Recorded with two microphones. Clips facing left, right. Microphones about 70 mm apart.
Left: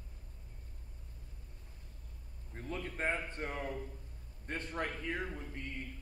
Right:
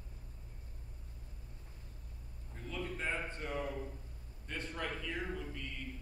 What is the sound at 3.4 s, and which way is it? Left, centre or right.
Speech, left.